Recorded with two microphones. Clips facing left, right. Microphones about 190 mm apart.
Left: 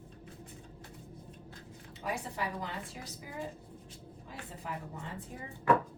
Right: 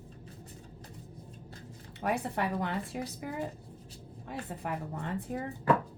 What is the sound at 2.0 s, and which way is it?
Speech, 60° right (ahead or behind).